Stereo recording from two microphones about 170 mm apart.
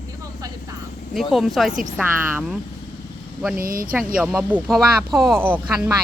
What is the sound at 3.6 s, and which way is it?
Speech, 55° right (ahead or behind).